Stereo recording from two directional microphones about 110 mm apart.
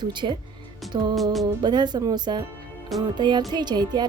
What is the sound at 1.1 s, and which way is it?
Music, centre (ahead or behind).